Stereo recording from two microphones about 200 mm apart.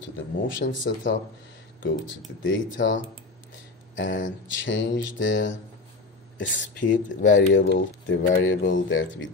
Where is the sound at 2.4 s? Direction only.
70° left (ahead or behind).